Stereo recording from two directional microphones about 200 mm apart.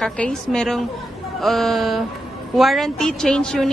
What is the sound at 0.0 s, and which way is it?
A woman's voice, 5° left (ahead or behind).